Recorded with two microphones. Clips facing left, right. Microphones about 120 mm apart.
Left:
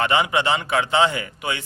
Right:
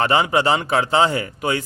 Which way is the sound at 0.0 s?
35° right (ahead or behind).